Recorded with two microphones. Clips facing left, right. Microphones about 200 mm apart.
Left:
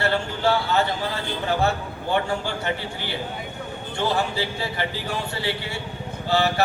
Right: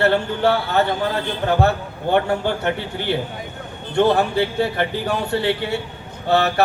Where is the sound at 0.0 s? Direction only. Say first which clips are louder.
Right 6 dB; 60° right (ahead or behind).